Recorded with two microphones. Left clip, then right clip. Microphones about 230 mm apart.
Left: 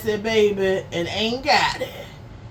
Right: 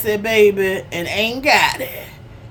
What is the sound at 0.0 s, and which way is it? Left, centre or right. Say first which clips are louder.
Speech: right 5 dB; right.